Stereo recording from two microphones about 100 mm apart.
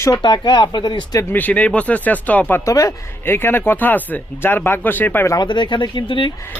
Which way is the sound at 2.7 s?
35° left (ahead or behind).